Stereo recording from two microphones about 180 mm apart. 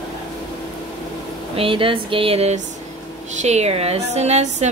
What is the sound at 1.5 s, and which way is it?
A woman's voice, 30° right (ahead or behind).